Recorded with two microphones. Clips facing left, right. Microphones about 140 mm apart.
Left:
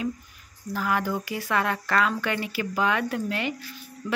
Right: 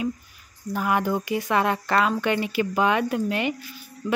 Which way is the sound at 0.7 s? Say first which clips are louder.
Right 3 dB; 20° right (ahead or behind).